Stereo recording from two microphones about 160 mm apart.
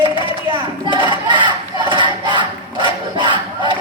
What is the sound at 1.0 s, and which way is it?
Crowd, 30° right (ahead or behind).